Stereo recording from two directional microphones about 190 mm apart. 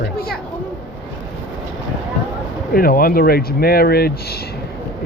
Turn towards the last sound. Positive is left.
turn(degrees=55)  # may be behind; listen again after turning